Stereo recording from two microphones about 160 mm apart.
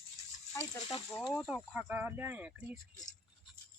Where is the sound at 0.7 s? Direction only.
25° left (ahead or behind).